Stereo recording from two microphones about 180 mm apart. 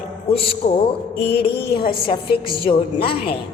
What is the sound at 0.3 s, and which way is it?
A woman's voice, 30° left (ahead or behind).